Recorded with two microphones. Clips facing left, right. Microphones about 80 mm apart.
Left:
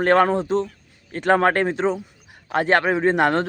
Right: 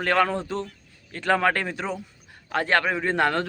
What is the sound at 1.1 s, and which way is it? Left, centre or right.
A man's voice, left.